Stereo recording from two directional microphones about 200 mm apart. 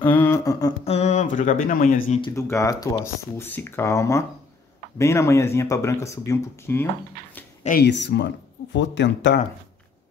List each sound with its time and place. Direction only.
0.0 s speech: 10° left (ahead or behind)
0.8 s speech: 35° left (ahead or behind)
2.2 s speech: 15° left (ahead or behind)
7.6 s speech: 50° left (ahead or behind)